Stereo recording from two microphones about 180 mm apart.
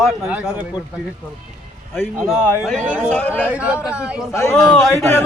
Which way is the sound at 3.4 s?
5° right (ahead or behind).